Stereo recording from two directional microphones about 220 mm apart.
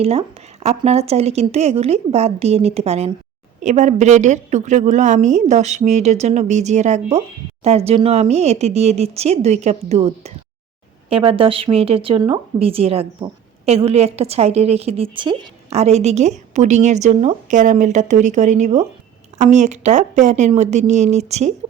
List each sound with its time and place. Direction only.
0.0 s a woman's voice: 25° right (ahead or behind)